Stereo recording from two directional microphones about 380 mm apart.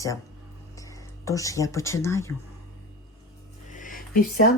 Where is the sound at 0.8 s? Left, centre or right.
Centre.